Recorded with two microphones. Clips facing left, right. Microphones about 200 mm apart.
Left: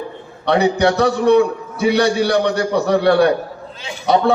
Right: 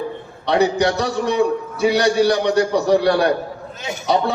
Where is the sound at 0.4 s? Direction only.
60° left (ahead or behind).